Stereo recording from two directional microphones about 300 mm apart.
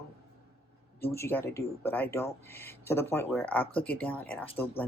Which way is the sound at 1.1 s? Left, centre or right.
Centre.